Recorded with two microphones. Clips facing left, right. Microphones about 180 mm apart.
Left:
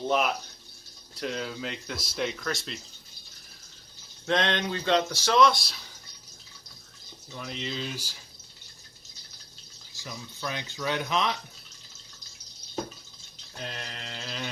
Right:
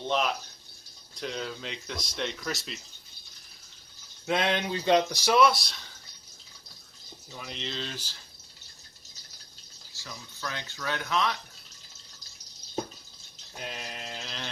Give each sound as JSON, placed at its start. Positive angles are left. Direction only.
{"t": 0.1, "sound": "speech", "side_deg": 5}
{"t": 4.3, "sound": "speech", "side_deg": -10}
{"t": 7.3, "sound": "speech", "side_deg": 0}
{"t": 9.9, "sound": "speech", "side_deg": 15}
{"t": 13.6, "sound": "mantra", "side_deg": -5}